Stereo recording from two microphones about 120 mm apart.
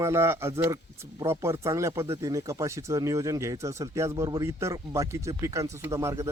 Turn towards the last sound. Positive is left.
turn(degrees=-25)  # may be behind; listen again after turning